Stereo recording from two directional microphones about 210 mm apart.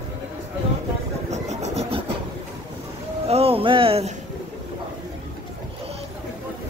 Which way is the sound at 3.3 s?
30° right (ahead or behind).